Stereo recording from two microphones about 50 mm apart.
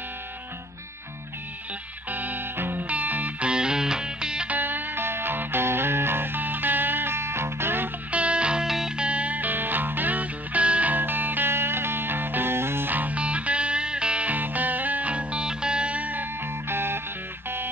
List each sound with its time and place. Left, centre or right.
2.0 s music: right
2.9 s music: right
3.4 s music: centre
4.5 s music: right
8.1 s music: right
8.6 s music: centre; by 12.9 s right
12.9 s music: right
14.3 s music: right
16.6 s music: right